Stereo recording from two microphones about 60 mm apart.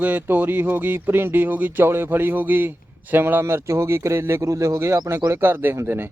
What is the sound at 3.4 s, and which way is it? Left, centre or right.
Speech, right.